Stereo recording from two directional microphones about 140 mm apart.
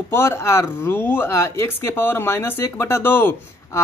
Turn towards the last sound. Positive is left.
turn(degrees=15)  # may be behind; listen again after turning